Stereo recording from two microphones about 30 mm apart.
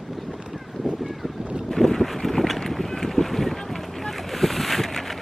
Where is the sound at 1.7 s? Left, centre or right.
Centre.